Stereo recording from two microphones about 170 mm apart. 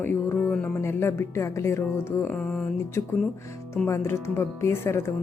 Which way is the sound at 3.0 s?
15° left (ahead or behind).